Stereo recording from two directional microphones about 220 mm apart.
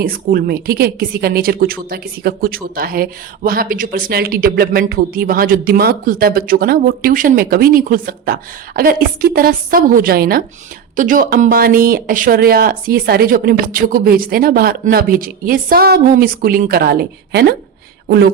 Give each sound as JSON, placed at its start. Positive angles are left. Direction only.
{"t": 0.0, "sound": "a woman's voice", "side_deg": -40}